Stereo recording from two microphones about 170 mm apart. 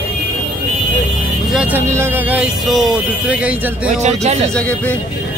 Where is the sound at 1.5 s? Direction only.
5° right (ahead or behind).